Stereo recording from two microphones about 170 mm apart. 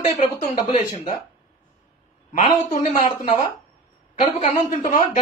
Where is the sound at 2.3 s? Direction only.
50° left (ahead or behind).